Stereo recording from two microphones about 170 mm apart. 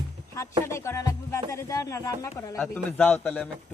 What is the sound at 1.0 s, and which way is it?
Music, 20° left (ahead or behind).